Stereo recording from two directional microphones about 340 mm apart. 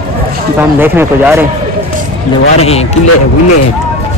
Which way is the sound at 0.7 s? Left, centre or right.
Centre.